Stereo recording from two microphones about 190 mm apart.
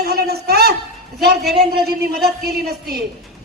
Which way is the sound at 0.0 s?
55° right (ahead or behind).